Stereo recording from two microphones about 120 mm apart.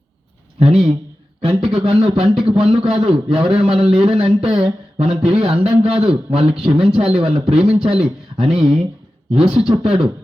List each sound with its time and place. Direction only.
0.6 s speech: 50° right (ahead or behind)
2.2 s a man's voice: 5° right (ahead or behind)
2.5 s speech: 50° right (ahead or behind)